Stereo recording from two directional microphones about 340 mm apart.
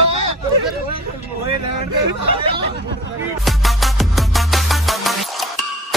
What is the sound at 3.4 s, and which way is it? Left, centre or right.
Music, centre.